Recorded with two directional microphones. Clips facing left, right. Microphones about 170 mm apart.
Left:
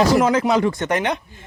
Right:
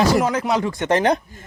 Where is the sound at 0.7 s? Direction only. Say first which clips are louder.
Right 4 dB; 30° right (ahead or behind).